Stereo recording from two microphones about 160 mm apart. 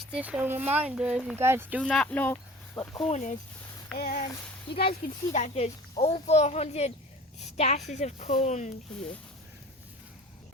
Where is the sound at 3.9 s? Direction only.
70° left (ahead or behind).